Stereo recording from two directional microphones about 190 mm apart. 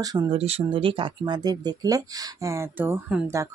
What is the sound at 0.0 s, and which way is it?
Speech, 20° right (ahead or behind).